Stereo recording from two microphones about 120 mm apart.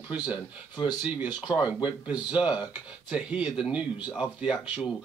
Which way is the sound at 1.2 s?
35° left (ahead or behind).